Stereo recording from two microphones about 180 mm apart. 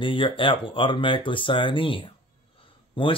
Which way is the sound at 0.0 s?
30° left (ahead or behind).